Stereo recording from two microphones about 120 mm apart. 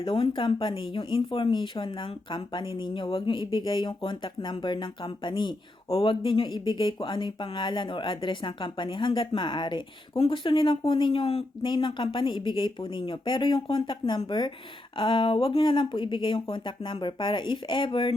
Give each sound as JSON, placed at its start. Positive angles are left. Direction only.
{"t": 0.0, "sound": "speech", "side_deg": 50}
{"t": 11.7, "sound": "speech", "side_deg": 45}